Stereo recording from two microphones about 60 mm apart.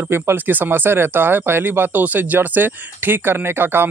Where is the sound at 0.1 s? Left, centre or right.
Right.